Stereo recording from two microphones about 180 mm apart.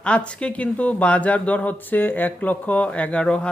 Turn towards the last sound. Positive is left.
turn(degrees=5)  # may be behind; listen again after turning